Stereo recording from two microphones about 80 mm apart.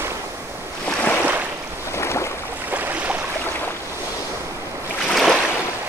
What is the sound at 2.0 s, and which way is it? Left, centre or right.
Boat, left.